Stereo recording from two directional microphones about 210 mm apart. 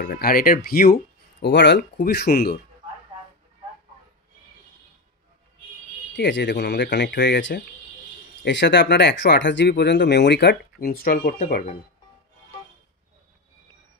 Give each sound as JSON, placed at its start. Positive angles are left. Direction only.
{"t": 0.0, "sound": "speech", "side_deg": 45}
{"t": 6.1, "sound": "speech", "side_deg": 55}